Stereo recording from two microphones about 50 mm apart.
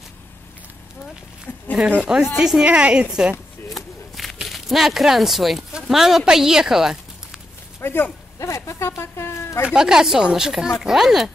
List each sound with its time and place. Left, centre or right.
1.8 s a woman's voice: right
2.3 s speech: centre
2.6 s a woman's voice: right
3.8 s walk: centre
4.5 s speech: centre
7.8 s speech: left
8.4 s a sound: left
9.8 s speech: centre